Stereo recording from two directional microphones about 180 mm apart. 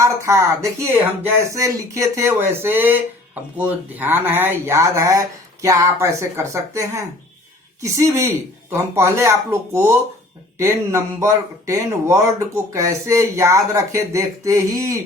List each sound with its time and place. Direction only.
0.0 s speech: 15° right (ahead or behind)